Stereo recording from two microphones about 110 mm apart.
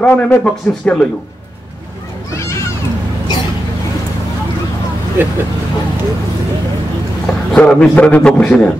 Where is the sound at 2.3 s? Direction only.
25° left (ahead or behind).